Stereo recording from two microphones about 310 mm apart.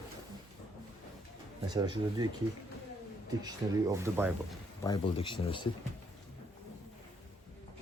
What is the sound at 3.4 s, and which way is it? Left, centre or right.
Speech, centre.